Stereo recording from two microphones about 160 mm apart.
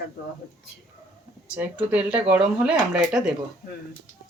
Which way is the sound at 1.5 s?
10° right (ahead or behind).